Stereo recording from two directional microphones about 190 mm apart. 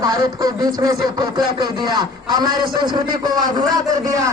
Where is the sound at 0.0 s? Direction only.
20° right (ahead or behind).